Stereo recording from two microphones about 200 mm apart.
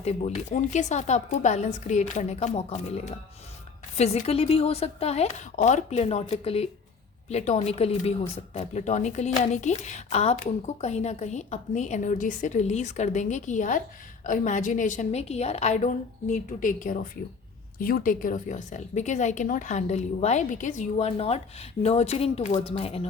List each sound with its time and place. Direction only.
0.0 s speech: 30° left (ahead or behind)